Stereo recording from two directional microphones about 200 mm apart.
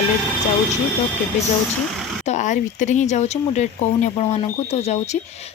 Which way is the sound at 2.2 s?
35° left (ahead or behind).